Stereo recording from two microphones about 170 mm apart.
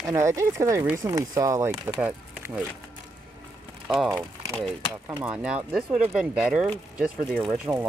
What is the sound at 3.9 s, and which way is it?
Speech, centre (ahead or behind).